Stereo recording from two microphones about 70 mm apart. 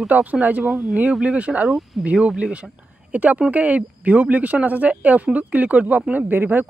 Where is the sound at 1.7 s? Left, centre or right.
Centre.